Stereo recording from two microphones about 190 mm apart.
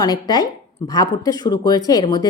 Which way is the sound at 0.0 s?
20° left (ahead or behind).